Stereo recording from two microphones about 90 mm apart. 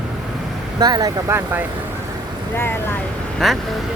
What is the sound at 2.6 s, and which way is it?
Speech, 25° left (ahead or behind).